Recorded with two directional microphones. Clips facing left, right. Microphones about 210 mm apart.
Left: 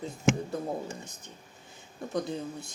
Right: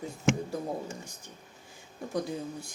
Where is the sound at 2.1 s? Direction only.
10° right (ahead or behind).